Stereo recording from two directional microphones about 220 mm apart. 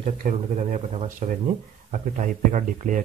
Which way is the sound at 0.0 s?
30° right (ahead or behind).